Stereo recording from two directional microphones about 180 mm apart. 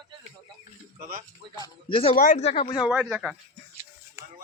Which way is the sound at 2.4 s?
35° left (ahead or behind).